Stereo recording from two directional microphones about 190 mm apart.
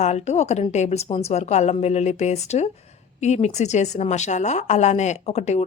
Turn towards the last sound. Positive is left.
turn(degrees=35)  # may be behind; listen again after turning